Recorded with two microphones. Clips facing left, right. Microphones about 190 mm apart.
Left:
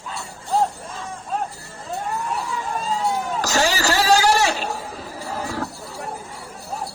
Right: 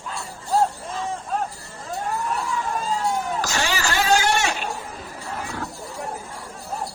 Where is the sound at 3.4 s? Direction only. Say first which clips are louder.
Left 4 dB; 40° left (ahead or behind).